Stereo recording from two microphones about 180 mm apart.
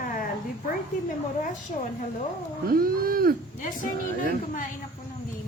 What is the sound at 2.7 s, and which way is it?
Speech, 55° right (ahead or behind).